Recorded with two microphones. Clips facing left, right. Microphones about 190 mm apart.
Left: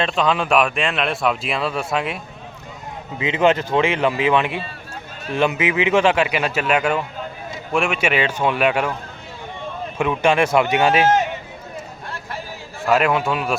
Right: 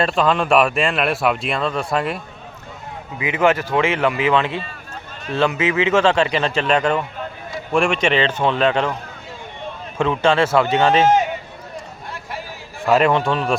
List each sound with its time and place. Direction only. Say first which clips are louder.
0.0 s speech: right 2 dB; centre (ahead or behind)
3.2 s speech: even; 20° left (ahead or behind)
10.0 s speech: right 1 dB; 15° left (ahead or behind)
12.8 s speech: right 2 dB; 5° left (ahead or behind)